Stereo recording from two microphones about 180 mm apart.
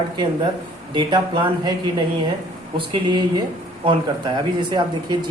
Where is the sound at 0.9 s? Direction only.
25° right (ahead or behind).